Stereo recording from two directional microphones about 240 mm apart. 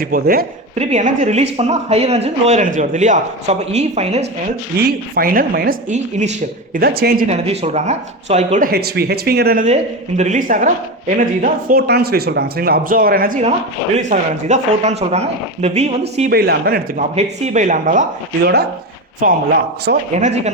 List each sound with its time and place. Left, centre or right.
0.0 s speech: right
6.7 s speech: right
7.3 s speech: right
16.3 s speech: right
17.2 s speech: right
20.1 s speech: right